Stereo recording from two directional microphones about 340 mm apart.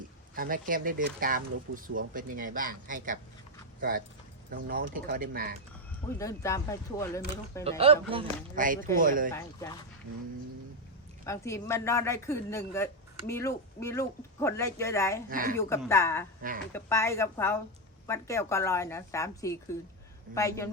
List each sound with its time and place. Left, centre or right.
0.3 s speech: right
6.1 s a woman's voice: centre
7.6 s speech: centre
9.3 s a woman's voice: centre
11.3 s a woman's voice: centre
15.3 s speech: right
15.5 s a woman's voice: centre